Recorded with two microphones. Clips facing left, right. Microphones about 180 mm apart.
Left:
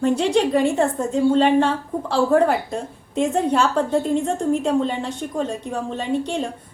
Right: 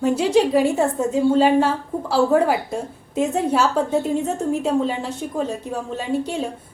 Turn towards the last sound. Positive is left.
turn(degrees=-5)  # may be behind; listen again after turning